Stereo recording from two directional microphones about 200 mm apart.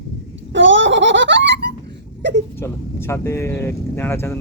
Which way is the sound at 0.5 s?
65° right (ahead or behind).